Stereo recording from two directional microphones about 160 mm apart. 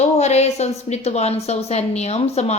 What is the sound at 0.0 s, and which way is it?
A woman's voice, 45° left (ahead or behind).